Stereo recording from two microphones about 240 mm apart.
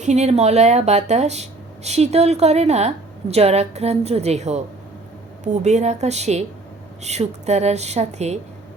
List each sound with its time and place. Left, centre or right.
0.0 s speech: right